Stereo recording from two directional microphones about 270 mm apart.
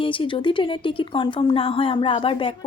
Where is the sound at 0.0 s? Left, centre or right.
Centre.